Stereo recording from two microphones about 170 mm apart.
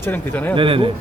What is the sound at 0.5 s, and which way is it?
Speech, 30° right (ahead or behind).